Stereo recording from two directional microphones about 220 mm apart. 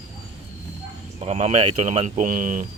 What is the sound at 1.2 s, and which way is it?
Speech, 30° right (ahead or behind).